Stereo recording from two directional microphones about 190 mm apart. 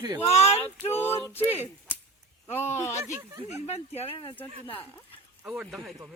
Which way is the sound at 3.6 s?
35° left (ahead or behind).